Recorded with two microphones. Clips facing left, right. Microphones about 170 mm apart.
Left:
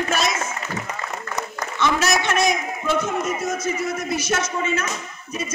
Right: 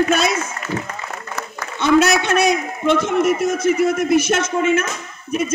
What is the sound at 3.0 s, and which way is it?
Speech, 90° right.